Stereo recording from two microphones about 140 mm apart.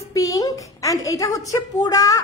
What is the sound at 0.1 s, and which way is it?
A woman's voice, 25° left (ahead or behind).